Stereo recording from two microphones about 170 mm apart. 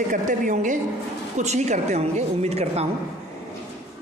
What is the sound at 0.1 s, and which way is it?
A woman's voice, 50° right (ahead or behind).